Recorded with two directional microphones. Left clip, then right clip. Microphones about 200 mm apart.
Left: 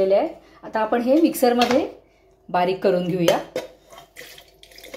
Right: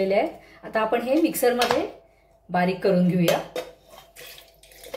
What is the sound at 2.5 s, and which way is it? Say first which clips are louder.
Speech: left 3 dB; 30° left (ahead or behind).